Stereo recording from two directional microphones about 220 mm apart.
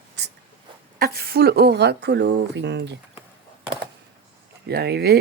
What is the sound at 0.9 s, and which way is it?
Speech, 45° right (ahead or behind).